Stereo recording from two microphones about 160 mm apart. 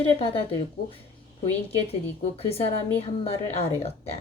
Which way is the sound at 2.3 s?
35° left (ahead or behind).